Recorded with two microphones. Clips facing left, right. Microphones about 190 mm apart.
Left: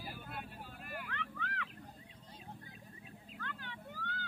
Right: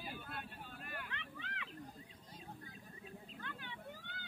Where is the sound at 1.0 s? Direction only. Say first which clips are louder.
Left 5 dB; 20° right (ahead or behind).